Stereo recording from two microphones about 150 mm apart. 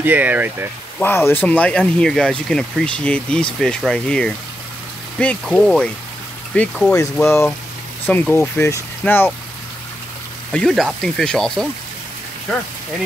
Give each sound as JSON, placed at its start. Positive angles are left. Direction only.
{"t": 0.0, "sound": "speech", "side_deg": -10}
{"t": 0.9, "sound": "speech", "side_deg": 15}
{"t": 5.5, "sound": "speech", "side_deg": 5}
{"t": 10.5, "sound": "speech", "side_deg": 5}